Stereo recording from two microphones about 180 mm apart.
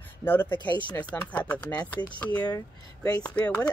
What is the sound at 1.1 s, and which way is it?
Speech, 10° left (ahead or behind).